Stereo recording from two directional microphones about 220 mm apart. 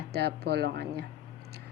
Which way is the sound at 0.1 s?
50° right (ahead or behind).